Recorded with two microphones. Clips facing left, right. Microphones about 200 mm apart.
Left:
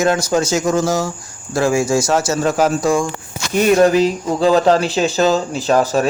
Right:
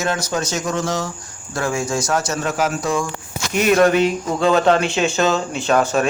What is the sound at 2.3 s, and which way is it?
Speech, 35° left (ahead or behind).